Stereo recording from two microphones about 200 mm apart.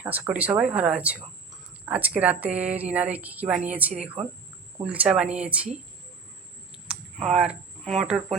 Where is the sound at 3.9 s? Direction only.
30° right (ahead or behind).